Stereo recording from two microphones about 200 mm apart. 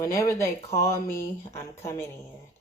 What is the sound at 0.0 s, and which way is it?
Speech, 15° left (ahead or behind).